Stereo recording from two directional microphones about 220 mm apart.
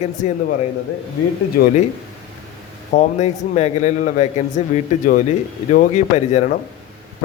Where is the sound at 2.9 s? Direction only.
35° left (ahead or behind).